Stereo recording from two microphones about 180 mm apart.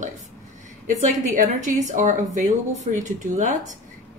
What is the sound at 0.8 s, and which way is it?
Speech, 45° right (ahead or behind).